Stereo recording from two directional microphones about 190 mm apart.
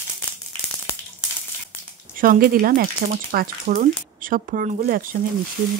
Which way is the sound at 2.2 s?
50° right (ahead or behind).